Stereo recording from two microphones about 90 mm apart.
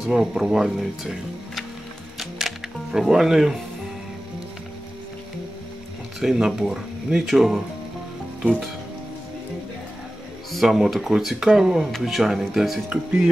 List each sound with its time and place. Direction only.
0.0 s speech: 5° right (ahead or behind)
2.1 s music: 5° right (ahead or behind)
6.1 s speech: 5° right (ahead or behind)
10.5 s speech: centre (ahead or behind)